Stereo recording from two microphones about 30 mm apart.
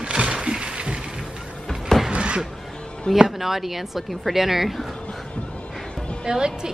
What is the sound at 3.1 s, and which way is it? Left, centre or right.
Speech, left.